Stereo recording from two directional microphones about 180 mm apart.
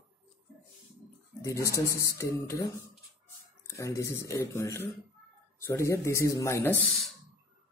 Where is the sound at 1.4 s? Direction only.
15° left (ahead or behind).